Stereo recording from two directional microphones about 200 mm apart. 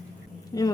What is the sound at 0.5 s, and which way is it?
Speech, 15° left (ahead or behind).